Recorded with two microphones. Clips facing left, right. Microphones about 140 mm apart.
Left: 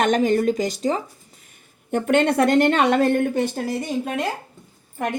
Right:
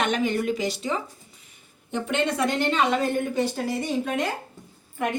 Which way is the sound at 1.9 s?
60° left (ahead or behind).